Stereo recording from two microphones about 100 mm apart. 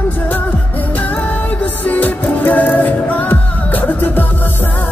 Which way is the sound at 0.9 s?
15° left (ahead or behind).